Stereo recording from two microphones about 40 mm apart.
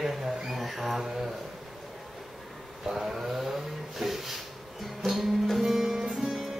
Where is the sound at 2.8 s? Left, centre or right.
Centre.